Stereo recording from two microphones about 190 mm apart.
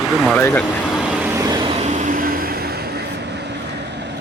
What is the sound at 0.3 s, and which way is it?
Speech, 5° left (ahead or behind).